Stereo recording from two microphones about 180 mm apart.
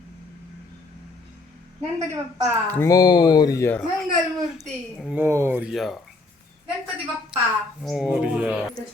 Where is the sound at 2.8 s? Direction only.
20° left (ahead or behind).